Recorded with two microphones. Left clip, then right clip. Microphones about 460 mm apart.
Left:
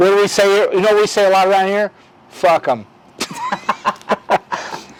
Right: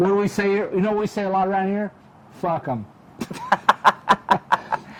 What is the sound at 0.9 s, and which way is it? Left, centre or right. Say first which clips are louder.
Speech: left 10 dB; centre.